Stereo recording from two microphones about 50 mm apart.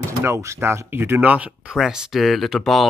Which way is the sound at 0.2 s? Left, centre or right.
Right.